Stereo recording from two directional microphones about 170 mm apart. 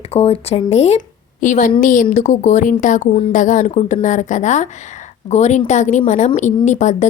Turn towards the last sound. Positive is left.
turn(degrees=45)  # may be behind; listen again after turning